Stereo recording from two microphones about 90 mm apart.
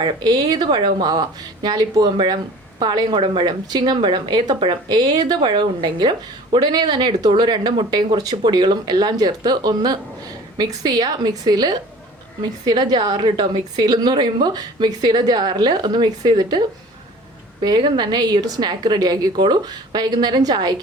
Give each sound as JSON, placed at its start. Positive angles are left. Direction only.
{"t": 0.0, "sound": "a woman's voice", "side_deg": -50}
{"t": 4.9, "sound": "a woman's voice", "side_deg": -50}